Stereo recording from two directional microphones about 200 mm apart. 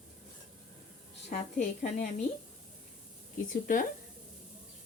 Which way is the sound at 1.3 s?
40° left (ahead or behind).